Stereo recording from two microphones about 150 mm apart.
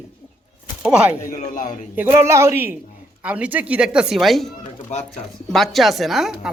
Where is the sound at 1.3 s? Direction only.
60° left (ahead or behind).